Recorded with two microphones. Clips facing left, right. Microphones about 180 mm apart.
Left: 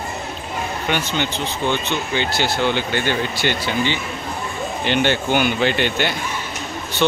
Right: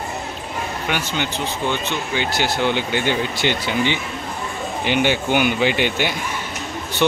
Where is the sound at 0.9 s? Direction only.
5° right (ahead or behind).